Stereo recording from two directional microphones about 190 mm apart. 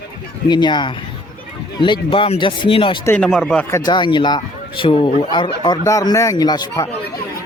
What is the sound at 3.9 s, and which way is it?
Speech, 25° left (ahead or behind).